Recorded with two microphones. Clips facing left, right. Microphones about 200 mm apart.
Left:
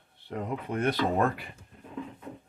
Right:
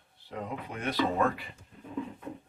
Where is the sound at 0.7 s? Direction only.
50° left (ahead or behind).